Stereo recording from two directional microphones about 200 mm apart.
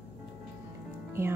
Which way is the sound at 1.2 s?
15° right (ahead or behind).